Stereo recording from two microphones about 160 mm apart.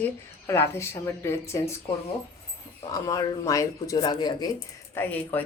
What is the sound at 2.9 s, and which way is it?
Speech, 20° left (ahead or behind).